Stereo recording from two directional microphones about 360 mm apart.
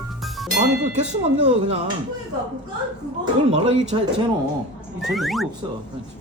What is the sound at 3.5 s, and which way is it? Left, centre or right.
Speech, centre.